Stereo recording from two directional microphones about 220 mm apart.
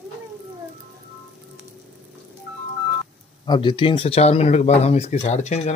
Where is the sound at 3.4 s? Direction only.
20° left (ahead or behind).